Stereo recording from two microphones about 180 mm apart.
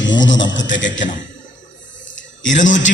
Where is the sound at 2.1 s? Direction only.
45° left (ahead or behind).